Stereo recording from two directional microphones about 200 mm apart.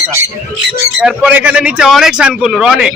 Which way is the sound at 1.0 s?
5° right (ahead or behind).